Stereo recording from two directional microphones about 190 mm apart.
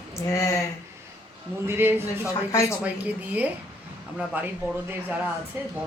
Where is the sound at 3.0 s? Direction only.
10° right (ahead or behind).